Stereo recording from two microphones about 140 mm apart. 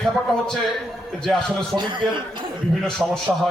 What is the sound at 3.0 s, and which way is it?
Speech, 10° right (ahead or behind).